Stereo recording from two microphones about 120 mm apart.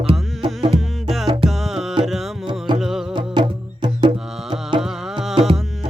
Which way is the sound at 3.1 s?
40° right (ahead or behind).